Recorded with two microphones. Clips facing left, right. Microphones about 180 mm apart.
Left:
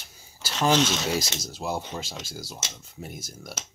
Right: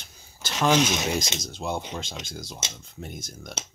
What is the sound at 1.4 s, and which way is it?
Speech, 5° left (ahead or behind).